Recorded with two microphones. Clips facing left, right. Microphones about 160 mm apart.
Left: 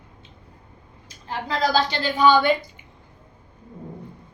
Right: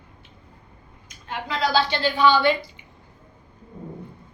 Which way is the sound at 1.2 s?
40° left (ahead or behind).